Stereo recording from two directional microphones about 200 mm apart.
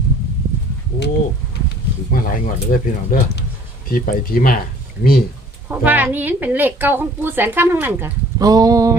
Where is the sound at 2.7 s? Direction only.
45° left (ahead or behind).